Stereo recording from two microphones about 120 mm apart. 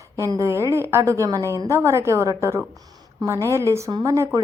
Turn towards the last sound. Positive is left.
turn(degrees=-25)  # may be behind; listen again after turning